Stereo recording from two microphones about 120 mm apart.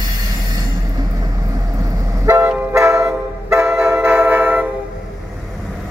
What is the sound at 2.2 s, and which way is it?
Vehicle, 25° right (ahead or behind).